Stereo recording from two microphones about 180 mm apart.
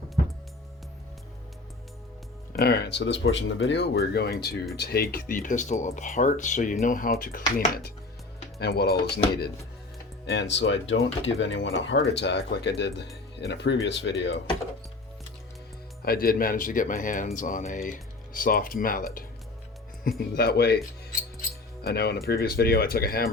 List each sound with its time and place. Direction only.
2.5 s speech: 60° left (ahead or behind)
8.5 s speech: 65° left (ahead or behind)
10.3 s speech: 80° left
16.0 s speech: 55° left (ahead or behind)